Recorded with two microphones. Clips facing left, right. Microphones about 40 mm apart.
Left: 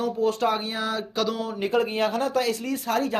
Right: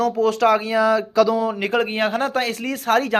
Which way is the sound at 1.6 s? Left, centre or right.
Right.